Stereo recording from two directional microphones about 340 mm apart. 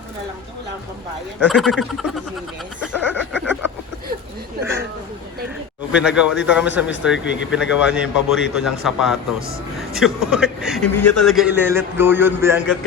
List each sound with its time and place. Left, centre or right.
1.4 s a man's voice: centre
2.9 s a sound: centre
5.9 s a man's voice: centre
6.8 s speech: left
7.1 s a man's voice: centre